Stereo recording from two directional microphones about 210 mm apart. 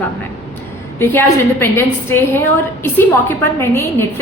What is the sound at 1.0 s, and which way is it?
A woman's voice, 10° left (ahead or behind).